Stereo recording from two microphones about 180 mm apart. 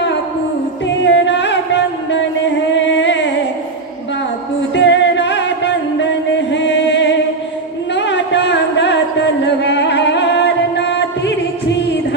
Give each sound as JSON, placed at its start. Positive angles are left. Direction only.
{"t": 1.0, "sound": "music", "side_deg": 80}
{"t": 2.7, "sound": "carnatic music", "side_deg": 90}
{"t": 4.7, "sound": "music", "side_deg": 85}